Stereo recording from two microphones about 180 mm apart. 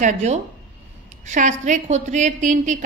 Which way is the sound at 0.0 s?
40° right (ahead or behind).